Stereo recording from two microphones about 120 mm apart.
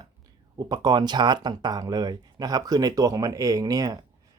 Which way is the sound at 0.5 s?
35° right (ahead or behind).